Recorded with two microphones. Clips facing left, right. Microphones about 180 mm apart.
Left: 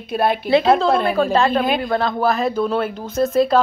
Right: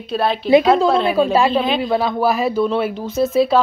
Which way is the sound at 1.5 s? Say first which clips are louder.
Even; 10° left (ahead or behind).